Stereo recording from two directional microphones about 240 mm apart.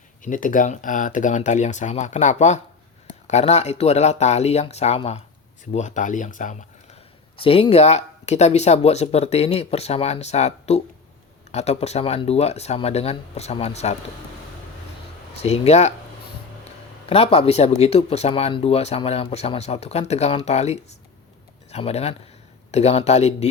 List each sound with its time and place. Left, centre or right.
0.2 s speech: left
15.4 s speech: left
17.1 s speech: left